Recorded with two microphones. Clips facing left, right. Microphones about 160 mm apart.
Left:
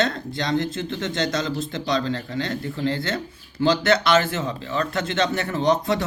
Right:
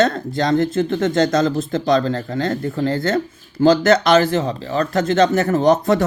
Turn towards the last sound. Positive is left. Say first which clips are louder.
# right 6 dB
turn(degrees=-50)  # may be behind; listen again after turning